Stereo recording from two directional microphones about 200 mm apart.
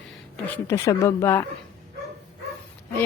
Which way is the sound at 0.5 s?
15° left (ahead or behind).